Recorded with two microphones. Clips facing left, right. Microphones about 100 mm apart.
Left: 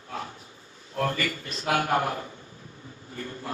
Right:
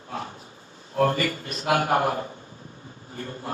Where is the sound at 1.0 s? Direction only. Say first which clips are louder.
Right 5 dB; 40° right (ahead or behind).